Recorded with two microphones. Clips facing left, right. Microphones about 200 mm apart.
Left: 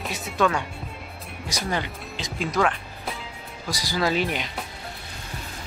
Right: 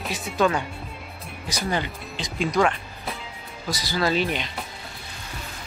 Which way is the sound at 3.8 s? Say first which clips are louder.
Even; 15° left (ahead or behind).